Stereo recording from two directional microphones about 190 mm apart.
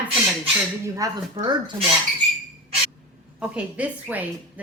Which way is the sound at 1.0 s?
20° right (ahead or behind).